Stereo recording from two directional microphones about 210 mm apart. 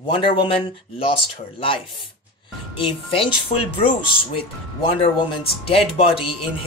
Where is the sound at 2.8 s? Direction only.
25° left (ahead or behind).